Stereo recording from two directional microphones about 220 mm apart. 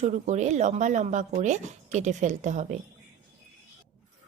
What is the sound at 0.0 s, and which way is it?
Speech, 30° right (ahead or behind).